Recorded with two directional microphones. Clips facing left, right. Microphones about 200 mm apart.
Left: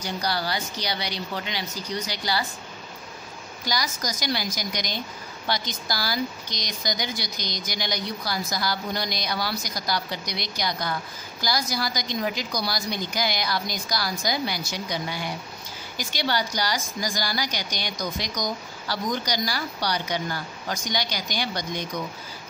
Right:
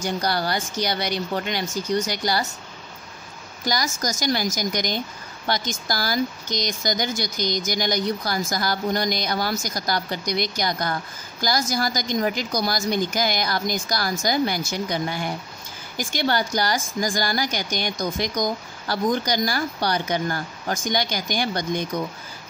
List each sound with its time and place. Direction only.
0.0 s a woman's voice: 50° right (ahead or behind)
3.6 s a woman's voice: 45° right (ahead or behind)